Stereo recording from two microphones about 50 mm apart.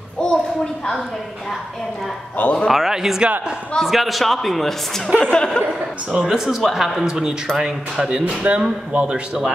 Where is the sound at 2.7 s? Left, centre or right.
Centre.